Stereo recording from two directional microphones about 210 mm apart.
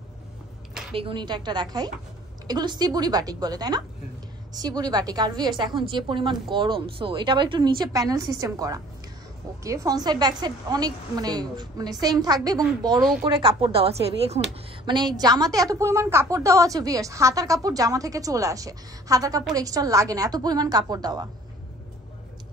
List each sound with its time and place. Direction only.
0.9 s a woman's voice: 25° right (ahead or behind)